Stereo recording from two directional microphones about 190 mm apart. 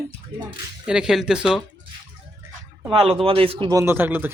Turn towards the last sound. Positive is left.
turn(degrees=-10)  # may be behind; listen again after turning